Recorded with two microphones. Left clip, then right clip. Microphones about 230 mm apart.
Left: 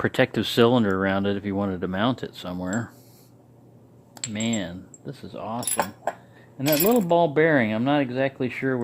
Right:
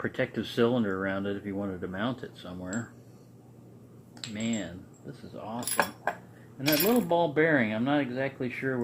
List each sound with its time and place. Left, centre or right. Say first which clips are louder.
0.0 s speech: left 9 dB; left
4.4 s speech: left 6 dB; left
5.7 s speech: even; centre
6.6 s speech: left 5 dB; left